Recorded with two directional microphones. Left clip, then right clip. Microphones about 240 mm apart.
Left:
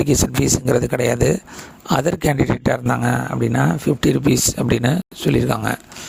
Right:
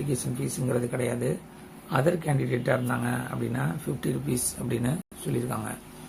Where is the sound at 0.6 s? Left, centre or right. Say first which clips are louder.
Left 8 dB; left.